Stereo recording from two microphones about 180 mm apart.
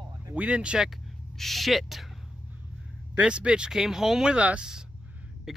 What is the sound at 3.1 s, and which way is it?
Speech, 5° right (ahead or behind).